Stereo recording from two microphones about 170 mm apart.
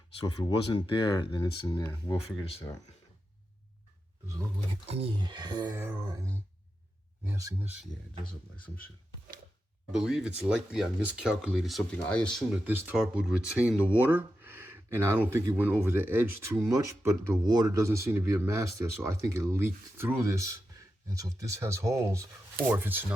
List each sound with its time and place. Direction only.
0.2 s speech: 30° left (ahead or behind)
2.1 s speech: 35° left (ahead or behind)
4.9 s speech: 35° right (ahead or behind); by 7.7 s 15° right (ahead or behind)
9.9 s speech: 5° right (ahead or behind)
12.6 s speech: 10° right (ahead or behind)